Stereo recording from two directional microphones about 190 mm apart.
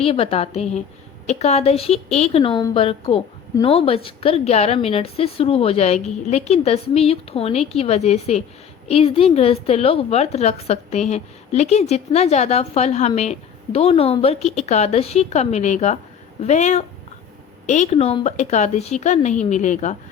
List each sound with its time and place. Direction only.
0.0 s a woman's voice: 30° left (ahead or behind)